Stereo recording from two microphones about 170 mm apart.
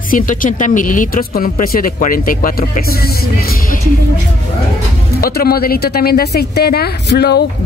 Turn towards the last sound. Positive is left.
turn(degrees=75)  # may be behind; listen again after turning